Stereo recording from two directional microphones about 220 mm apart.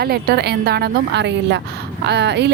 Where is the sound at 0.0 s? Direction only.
45° right (ahead or behind).